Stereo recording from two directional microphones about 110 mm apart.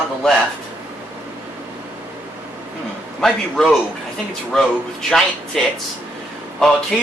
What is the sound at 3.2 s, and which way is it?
Speech, 5° left (ahead or behind).